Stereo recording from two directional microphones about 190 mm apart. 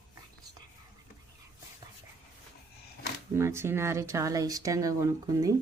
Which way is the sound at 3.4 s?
15° right (ahead or behind).